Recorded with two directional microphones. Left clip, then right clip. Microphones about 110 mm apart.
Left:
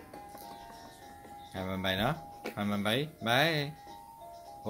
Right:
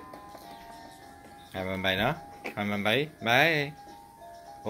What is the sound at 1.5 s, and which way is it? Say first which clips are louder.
Speech: right 5 dB; 20° left (ahead or behind).